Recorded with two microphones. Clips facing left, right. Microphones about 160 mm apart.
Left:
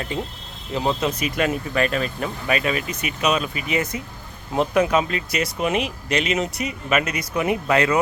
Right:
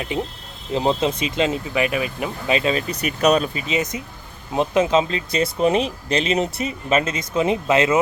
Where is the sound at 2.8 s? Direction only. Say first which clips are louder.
Right 5 dB; 35° right (ahead or behind).